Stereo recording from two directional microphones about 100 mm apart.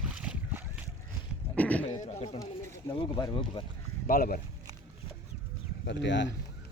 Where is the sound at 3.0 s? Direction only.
60° left (ahead or behind).